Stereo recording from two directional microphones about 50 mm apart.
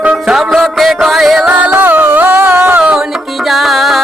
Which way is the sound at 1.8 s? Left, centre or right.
Right.